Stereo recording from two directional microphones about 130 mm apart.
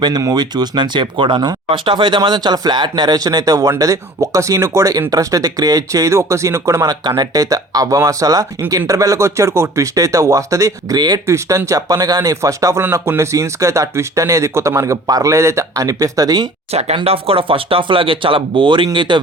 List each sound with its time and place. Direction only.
0.0 s speech: 30° right (ahead or behind)
16.7 s speech: 50° right (ahead or behind)